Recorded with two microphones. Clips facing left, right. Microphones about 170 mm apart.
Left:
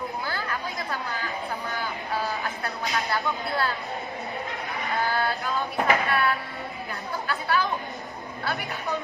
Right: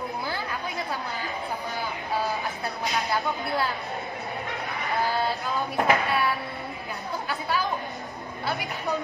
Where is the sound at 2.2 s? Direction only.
20° right (ahead or behind).